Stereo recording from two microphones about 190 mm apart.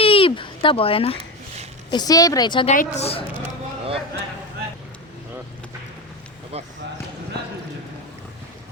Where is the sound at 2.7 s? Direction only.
35° left (ahead or behind).